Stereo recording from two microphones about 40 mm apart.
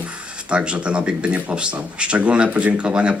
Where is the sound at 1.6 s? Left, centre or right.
Right.